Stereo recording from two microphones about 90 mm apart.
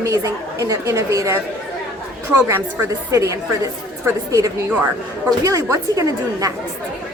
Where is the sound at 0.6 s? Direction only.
40° right (ahead or behind).